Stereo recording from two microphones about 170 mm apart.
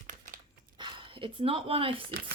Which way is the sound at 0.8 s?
30° right (ahead or behind).